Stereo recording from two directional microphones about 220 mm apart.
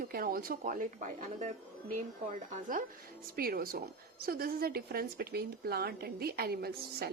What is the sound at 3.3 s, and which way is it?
Speech, 40° right (ahead or behind).